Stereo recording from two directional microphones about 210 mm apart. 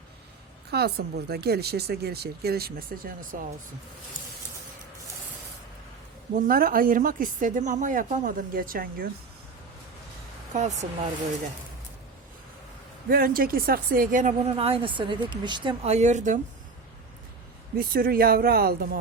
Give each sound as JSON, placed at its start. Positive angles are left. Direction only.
{"t": 0.7, "sound": "speech", "side_deg": -50}
{"t": 6.3, "sound": "speech", "side_deg": -45}
{"t": 10.5, "sound": "speech", "side_deg": -35}
{"t": 13.1, "sound": "speech", "side_deg": -45}
{"t": 14.5, "sound": "speech", "side_deg": -25}
{"t": 17.7, "sound": "speech", "side_deg": -45}